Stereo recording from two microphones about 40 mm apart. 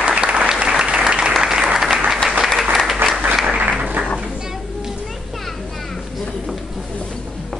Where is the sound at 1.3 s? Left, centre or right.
Centre.